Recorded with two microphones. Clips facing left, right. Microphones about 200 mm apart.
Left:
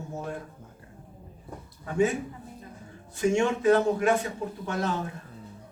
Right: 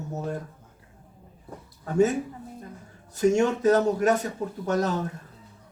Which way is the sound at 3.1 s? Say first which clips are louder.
Right 3 dB; 40° right (ahead or behind).